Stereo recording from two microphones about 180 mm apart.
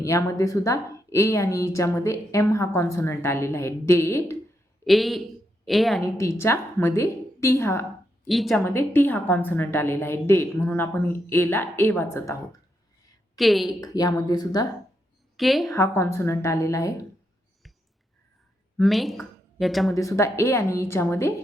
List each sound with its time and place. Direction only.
0.0 s a woman's voice: 15° left (ahead or behind)
4.9 s a man's voice: centre (ahead or behind)
6.0 s a woman's voice: 15° left (ahead or behind)
8.3 s a woman's voice: centre (ahead or behind)
8.6 s a woman's voice: 10° left (ahead or behind)
13.3 s a woman's voice: centre (ahead or behind)
13.8 s a woman's voice: 20° left (ahead or behind)
15.4 s a woman's voice: centre (ahead or behind)
15.7 s a woman's voice: 15° left (ahead or behind)
18.8 s speech: centre (ahead or behind)
20.0 s a woman's voice: 15° left (ahead or behind)